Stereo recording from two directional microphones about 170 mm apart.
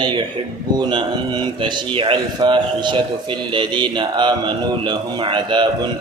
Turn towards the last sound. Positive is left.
turn(degrees=-25)  # may be behind; listen again after turning